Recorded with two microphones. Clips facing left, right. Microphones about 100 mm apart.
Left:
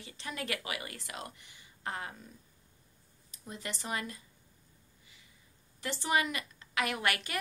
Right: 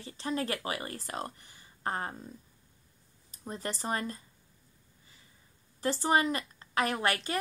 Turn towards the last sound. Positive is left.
turn(degrees=-30)  # may be behind; listen again after turning